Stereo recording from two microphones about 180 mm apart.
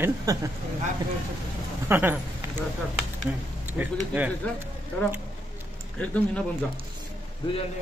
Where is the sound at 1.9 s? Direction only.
10° right (ahead or behind).